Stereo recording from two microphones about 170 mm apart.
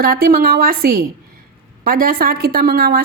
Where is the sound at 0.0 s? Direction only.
60° right (ahead or behind).